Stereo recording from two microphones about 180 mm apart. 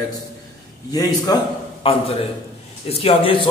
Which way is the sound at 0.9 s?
20° left (ahead or behind).